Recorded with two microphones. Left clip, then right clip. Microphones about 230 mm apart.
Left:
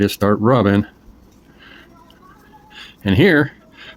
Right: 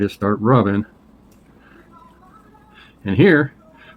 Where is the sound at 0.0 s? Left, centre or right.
Left.